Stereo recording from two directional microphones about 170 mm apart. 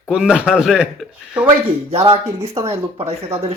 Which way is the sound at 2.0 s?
30° right (ahead or behind).